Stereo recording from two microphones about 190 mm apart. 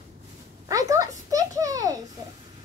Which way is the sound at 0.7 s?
20° right (ahead or behind).